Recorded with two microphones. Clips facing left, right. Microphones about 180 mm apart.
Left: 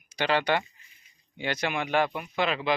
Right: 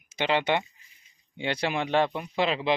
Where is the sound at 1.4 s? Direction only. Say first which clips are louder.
Right 2 dB; 30° right (ahead or behind).